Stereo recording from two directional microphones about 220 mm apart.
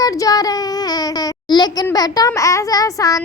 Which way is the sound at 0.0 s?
15° left (ahead or behind).